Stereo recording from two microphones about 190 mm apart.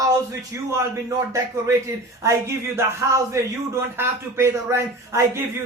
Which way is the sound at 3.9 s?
10° right (ahead or behind).